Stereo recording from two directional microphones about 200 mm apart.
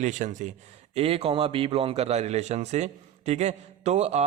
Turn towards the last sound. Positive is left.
turn(degrees=-35)  # may be behind; listen again after turning